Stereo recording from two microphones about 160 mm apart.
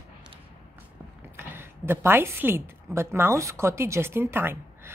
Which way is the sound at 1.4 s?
15° right (ahead or behind).